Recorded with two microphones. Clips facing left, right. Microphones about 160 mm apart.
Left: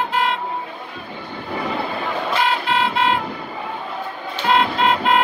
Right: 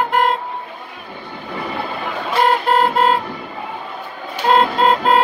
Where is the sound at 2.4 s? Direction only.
45° right (ahead or behind).